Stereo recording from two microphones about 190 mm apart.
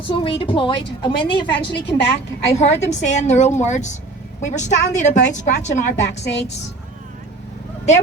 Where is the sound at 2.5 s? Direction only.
35° left (ahead or behind).